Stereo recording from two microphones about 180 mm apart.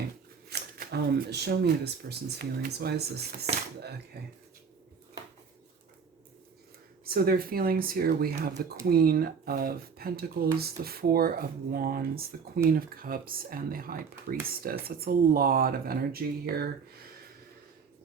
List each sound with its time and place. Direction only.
0.5 s speech: 65° right (ahead or behind)
7.0 s speech: 55° right (ahead or behind)